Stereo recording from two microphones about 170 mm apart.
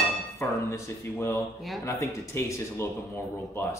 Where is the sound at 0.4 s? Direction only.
15° left (ahead or behind).